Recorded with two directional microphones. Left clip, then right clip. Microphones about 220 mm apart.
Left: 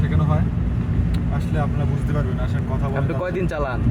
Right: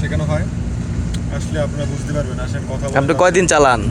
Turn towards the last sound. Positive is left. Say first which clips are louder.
# right 13 dB
turn(degrees=-45)  # may be behind; listen again after turning